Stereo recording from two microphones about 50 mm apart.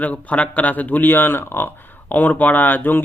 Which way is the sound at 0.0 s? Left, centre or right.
Left.